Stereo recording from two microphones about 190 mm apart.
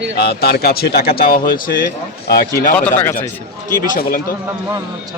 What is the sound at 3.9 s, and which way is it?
Speech, 50° left (ahead or behind).